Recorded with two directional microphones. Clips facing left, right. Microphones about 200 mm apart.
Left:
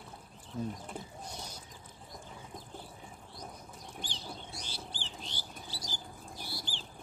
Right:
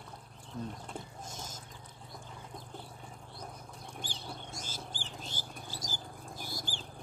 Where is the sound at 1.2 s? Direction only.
45° right (ahead or behind).